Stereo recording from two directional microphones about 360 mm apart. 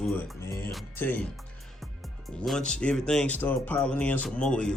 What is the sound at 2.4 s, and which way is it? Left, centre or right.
Speech, centre.